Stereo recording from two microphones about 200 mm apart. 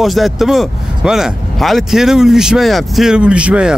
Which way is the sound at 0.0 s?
Centre (ahead or behind).